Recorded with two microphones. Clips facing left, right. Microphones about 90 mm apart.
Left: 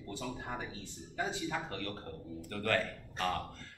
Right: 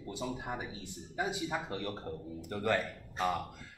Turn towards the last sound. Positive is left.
turn(degrees=-15)  # may be behind; listen again after turning